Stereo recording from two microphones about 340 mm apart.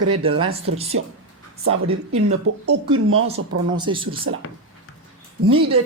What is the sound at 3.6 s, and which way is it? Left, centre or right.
Speech, centre.